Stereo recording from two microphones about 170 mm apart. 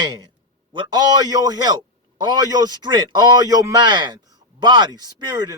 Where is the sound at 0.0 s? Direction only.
25° right (ahead or behind).